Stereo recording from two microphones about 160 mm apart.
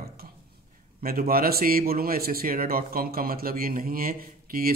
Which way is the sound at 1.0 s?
70° right (ahead or behind).